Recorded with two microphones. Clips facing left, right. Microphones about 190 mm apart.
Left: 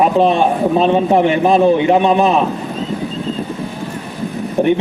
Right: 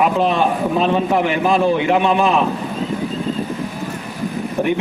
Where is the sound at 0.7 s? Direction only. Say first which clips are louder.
Left 5 dB; 30° left (ahead or behind).